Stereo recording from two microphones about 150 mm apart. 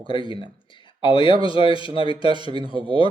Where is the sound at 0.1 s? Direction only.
35° left (ahead or behind).